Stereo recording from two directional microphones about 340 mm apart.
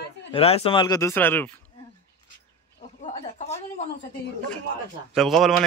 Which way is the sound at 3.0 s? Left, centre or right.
Centre.